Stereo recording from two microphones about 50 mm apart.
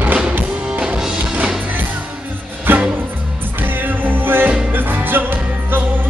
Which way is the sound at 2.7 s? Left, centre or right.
Right.